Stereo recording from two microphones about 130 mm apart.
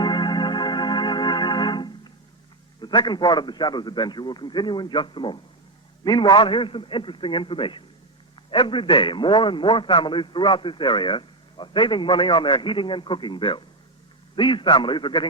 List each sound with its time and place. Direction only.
0.0 s organ: 35° left (ahead or behind)
2.8 s a man's voice: 35° left (ahead or behind)